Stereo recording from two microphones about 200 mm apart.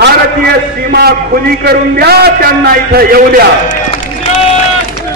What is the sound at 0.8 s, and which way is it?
A man's voice, 50° right (ahead or behind).